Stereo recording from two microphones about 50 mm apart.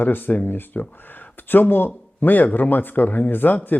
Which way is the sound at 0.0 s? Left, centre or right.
Left.